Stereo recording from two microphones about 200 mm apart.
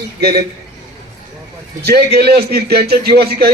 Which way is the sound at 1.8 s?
55° right (ahead or behind).